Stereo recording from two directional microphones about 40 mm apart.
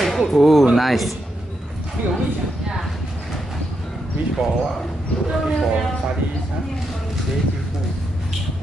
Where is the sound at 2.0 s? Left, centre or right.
Right.